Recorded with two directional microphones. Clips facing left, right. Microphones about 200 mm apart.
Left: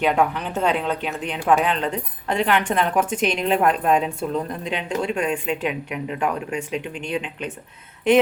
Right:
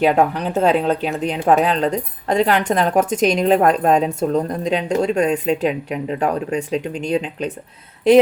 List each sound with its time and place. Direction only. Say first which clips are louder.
0.0 s speech: right 4 dB; 40° right (ahead or behind)